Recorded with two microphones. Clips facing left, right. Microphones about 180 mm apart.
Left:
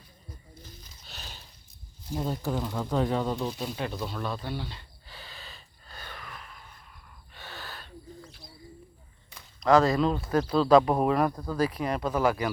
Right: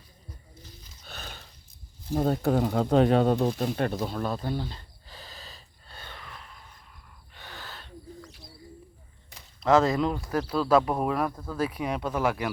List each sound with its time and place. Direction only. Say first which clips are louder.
1.0 s a sound: right 5 dB; 55° right (ahead or behind)
2.1 s speech: right 6 dB; 60° right (ahead or behind)
3.4 s snake: right 6 dB; 50° right (ahead or behind)
6.0 s gasp: left 1 dB; 25° right (ahead or behind)
9.6 s speech: even; 20° right (ahead or behind); by 12.5 s centre (ahead or behind)